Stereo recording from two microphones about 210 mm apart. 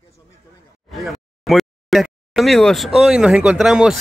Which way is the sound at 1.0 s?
Centre (ahead or behind).